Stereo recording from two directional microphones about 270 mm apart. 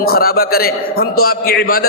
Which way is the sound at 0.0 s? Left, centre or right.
Left.